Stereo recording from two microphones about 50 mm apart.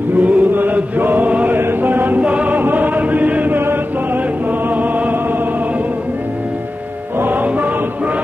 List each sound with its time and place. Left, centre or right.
0.2 s chant: right
1.6 s music: right
2.6 s choir: right
3.5 s music: right
7.2 s music: right